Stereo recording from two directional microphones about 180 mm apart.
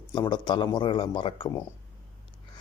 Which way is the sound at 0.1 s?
25° left (ahead or behind).